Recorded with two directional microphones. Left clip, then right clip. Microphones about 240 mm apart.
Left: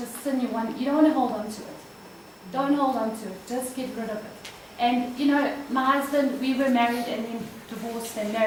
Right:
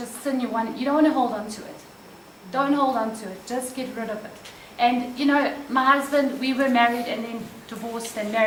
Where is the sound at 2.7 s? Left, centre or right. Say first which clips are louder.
Right 2 dB; left.